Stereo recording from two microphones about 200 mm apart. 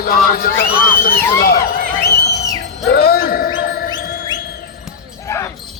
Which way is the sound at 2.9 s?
50° left (ahead or behind).